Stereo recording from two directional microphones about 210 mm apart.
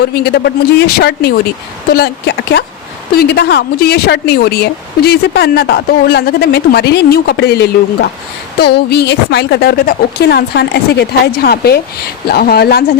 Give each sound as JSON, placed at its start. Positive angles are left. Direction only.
{"t": 0.0, "sound": "speech", "side_deg": 50}